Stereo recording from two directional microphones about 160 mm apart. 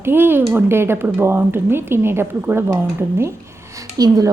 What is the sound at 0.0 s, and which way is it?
A woman's voice, 15° right (ahead or behind).